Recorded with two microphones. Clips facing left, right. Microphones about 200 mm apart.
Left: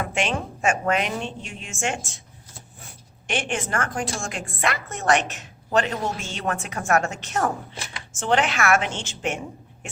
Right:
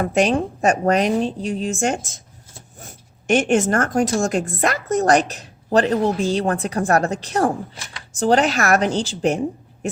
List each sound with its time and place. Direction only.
0.0 s a woman's voice: 40° right (ahead or behind)